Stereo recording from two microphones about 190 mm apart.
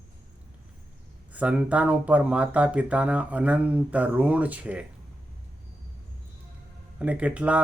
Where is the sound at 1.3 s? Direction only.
5° right (ahead or behind).